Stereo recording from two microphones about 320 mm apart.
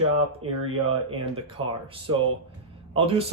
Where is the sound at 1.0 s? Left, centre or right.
Centre.